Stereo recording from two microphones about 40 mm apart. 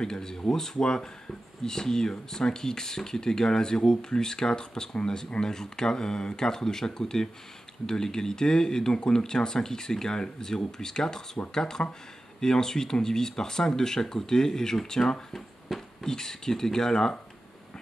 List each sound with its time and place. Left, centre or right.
0.0 s speech: centre
15.3 s speech: centre